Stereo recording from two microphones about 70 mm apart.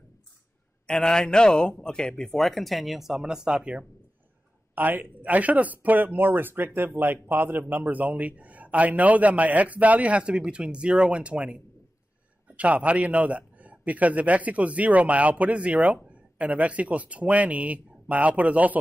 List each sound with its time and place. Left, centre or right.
0.8 s a man's voice: centre
4.7 s speech: right